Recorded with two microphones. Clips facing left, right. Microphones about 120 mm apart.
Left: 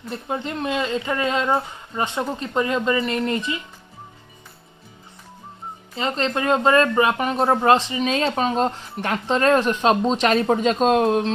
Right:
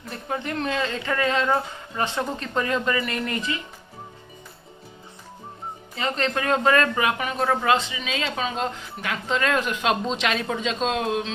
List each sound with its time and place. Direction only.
0.1 s speech: 20° left (ahead or behind)
5.9 s speech: 25° left (ahead or behind); by 11.3 s 45° left (ahead or behind)